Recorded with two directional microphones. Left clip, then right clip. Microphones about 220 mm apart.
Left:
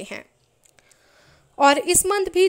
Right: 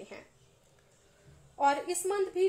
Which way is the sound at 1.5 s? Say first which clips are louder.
Left 12 dB; 40° left (ahead or behind).